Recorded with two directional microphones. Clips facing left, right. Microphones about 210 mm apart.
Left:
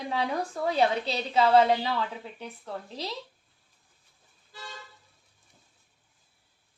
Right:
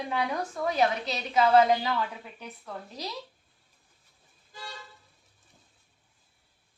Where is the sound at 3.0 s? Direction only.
30° left (ahead or behind).